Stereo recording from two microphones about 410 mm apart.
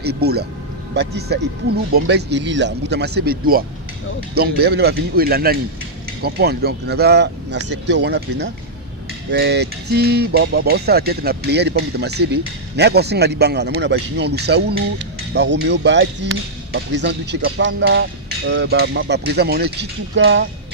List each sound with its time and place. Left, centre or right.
0.0 s speech: right